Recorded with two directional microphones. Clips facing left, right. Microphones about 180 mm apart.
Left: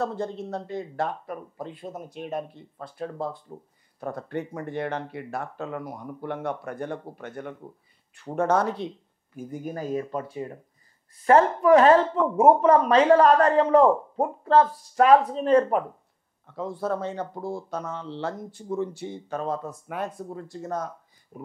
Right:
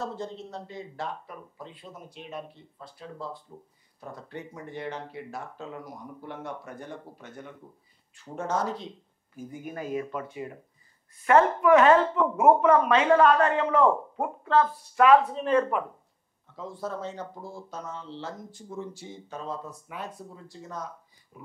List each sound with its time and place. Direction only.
0.0 s speech: 55° left (ahead or behind)
9.5 s speech: 35° left (ahead or behind)
16.5 s speech: 60° left (ahead or behind)